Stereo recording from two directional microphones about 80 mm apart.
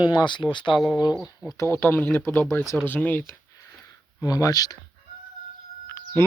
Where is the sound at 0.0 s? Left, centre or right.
Left.